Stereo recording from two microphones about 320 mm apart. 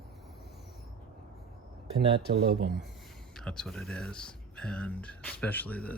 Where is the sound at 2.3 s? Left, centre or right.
Right.